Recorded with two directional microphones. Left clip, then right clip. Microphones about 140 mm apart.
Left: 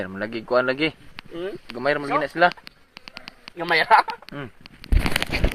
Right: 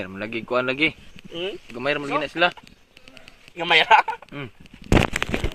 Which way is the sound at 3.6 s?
5° left (ahead or behind).